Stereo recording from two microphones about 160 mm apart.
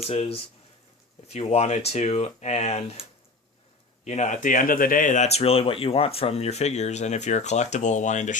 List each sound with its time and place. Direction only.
0.1 s speech: 40° left (ahead or behind)